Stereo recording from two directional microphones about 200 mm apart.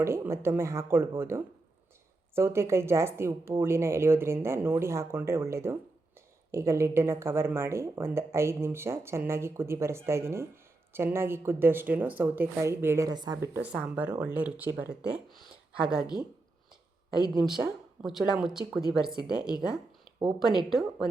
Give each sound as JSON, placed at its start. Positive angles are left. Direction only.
{"t": 0.0, "sound": "speech", "side_deg": -10}
{"t": 15.9, "sound": "speech", "side_deg": -5}
{"t": 18.0, "sound": "speech", "side_deg": -5}
{"t": 20.1, "sound": "speech", "side_deg": -20}
{"t": 20.6, "sound": "speech", "side_deg": 0}